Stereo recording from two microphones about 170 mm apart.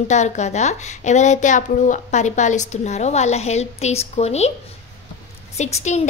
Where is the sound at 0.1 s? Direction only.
45° left (ahead or behind).